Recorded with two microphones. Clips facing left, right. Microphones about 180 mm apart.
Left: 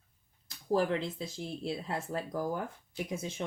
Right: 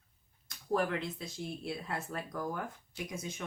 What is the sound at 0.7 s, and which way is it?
Speech, 30° left (ahead or behind).